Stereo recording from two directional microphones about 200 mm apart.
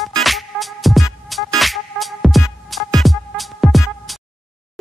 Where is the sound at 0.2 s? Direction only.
Centre (ahead or behind).